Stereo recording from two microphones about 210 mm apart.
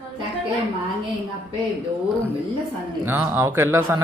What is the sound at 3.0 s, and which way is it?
Speech, 10° right (ahead or behind).